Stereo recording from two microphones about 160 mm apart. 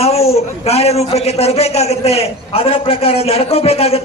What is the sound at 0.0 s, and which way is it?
A man's voice, 40° left (ahead or behind).